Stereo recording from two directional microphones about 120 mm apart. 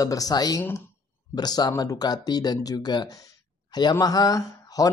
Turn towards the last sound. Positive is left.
turn(degrees=30)  # may be behind; listen again after turning